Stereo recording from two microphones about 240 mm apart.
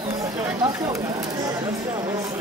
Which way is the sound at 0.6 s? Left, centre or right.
Centre.